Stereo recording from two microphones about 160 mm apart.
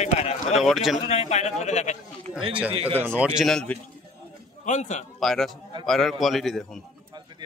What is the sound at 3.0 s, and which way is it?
Speech, 10° right (ahead or behind).